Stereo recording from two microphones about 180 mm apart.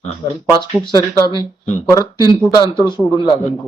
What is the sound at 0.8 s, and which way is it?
Speech, 25° left (ahead or behind).